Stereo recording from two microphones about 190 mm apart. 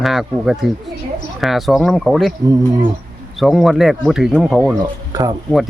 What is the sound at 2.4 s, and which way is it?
Speech, 20° right (ahead or behind).